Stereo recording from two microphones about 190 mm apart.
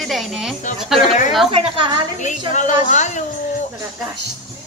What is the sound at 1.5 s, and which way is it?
Speech, 30° right (ahead or behind).